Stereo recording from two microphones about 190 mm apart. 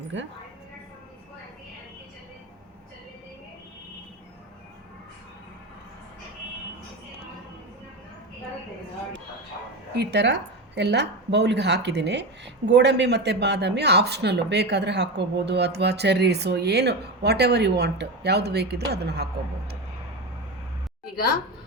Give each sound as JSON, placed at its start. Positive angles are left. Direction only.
{"t": 9.9, "sound": "speech", "side_deg": -60}